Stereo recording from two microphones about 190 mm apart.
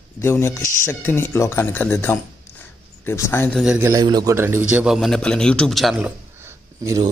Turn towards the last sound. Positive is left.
turn(degrees=-20)  # may be behind; listen again after turning